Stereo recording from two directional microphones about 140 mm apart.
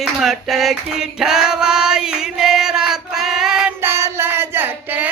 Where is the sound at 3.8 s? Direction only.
20° right (ahead or behind).